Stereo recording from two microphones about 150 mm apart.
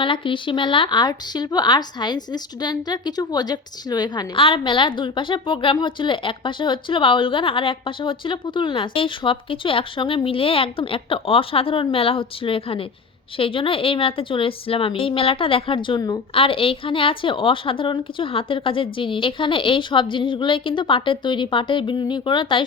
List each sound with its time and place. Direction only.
0.0 s speech: 35° left (ahead or behind)